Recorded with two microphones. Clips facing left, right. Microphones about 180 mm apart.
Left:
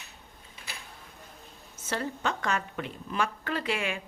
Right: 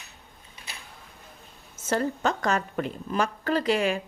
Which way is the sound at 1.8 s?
45° right (ahead or behind).